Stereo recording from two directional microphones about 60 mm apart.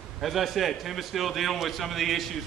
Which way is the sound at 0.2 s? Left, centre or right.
Centre.